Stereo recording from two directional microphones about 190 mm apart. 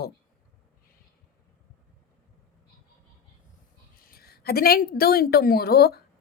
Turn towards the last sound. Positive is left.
turn(degrees=55)  # may be behind; listen again after turning